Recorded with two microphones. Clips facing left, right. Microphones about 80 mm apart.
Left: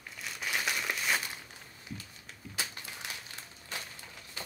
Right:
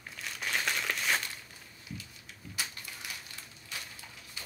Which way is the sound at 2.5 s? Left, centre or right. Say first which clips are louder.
Left 1 dB; left.